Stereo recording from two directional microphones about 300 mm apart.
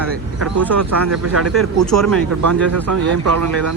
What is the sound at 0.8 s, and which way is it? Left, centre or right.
Speech, right.